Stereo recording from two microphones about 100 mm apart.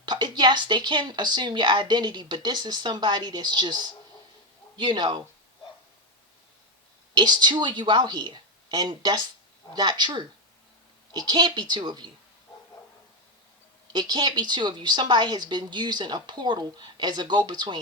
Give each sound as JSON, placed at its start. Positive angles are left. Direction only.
{"t": 0.0, "sound": "speech", "side_deg": -45}
{"t": 7.1, "sound": "speech", "side_deg": -45}
{"t": 13.9, "sound": "speech", "side_deg": -45}